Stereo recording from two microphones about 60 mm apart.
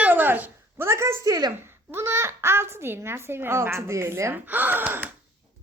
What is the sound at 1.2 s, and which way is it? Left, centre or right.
Speech, right.